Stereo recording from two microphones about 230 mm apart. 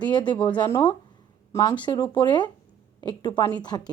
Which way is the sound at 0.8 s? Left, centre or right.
Centre.